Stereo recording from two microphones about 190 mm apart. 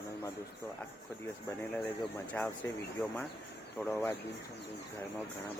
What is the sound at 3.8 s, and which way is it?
Speech, 15° left (ahead or behind).